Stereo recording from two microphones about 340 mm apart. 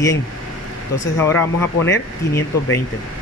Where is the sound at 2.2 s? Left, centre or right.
Centre.